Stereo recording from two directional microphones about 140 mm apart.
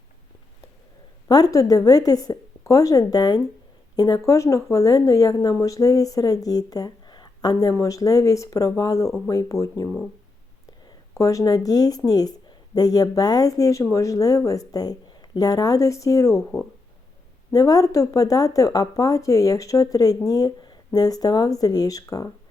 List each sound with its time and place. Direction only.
1.3 s speech: 25° left (ahead or behind)
11.2 s speech: 25° left (ahead or behind)
17.5 s speech: 25° left (ahead or behind)